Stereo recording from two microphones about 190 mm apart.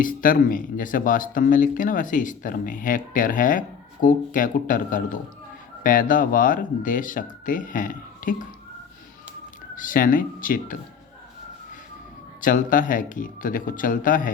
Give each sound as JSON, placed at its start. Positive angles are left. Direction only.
{"t": 0.0, "sound": "speech", "side_deg": 45}
{"t": 9.7, "sound": "speech", "side_deg": 45}
{"t": 12.4, "sound": "speech", "side_deg": 45}